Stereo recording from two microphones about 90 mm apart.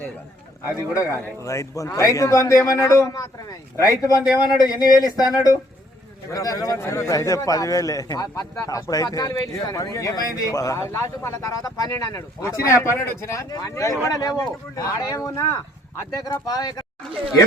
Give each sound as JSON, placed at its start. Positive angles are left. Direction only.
{"t": 1.4, "sound": "a man's voice", "side_deg": 35}
{"t": 4.0, "sound": "a man's voice", "side_deg": 45}